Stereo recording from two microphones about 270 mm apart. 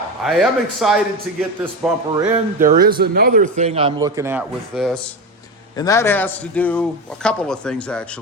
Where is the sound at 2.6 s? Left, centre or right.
Right; by 5.0 s centre.